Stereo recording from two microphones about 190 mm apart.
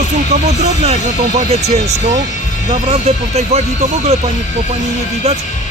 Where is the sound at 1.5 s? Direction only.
35° right (ahead or behind).